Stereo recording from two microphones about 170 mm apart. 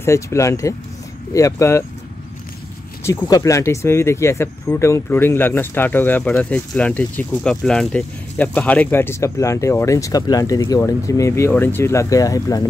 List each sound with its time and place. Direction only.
0.0 s speech: 15° left (ahead or behind)
3.0 s speech: 15° left (ahead or behind)